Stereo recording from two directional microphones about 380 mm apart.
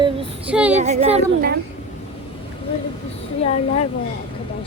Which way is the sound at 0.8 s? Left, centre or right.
Centre.